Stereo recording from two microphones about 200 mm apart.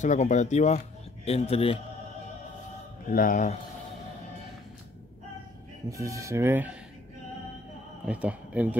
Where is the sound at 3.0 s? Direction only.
40° left (ahead or behind).